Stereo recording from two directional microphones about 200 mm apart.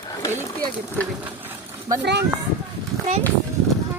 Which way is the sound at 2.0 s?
60° right (ahead or behind).